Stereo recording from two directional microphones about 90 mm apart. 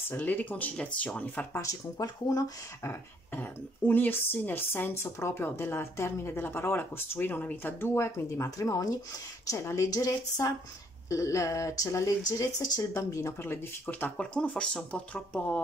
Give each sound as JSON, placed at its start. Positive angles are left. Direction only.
{"t": 0.1, "sound": "speech", "side_deg": 20}
{"t": 1.6, "sound": "speech", "side_deg": 40}
{"t": 2.9, "sound": "speech", "side_deg": 20}